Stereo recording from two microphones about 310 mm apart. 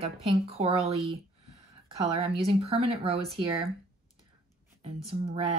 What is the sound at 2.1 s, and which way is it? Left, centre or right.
A woman's voice, centre.